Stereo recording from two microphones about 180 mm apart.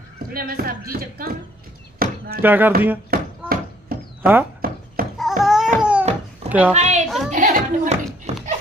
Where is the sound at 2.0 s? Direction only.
55° right (ahead or behind).